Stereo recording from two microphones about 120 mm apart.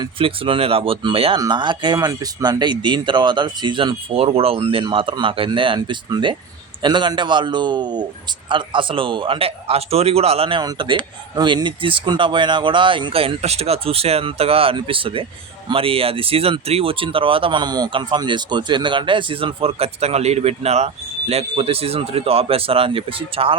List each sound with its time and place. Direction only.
0.0 s speech: 50° right (ahead or behind)
10.6 s speech: 35° right (ahead or behind)